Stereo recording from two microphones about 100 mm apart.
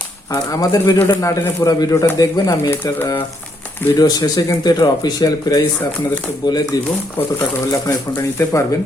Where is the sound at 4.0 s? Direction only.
40° left (ahead or behind).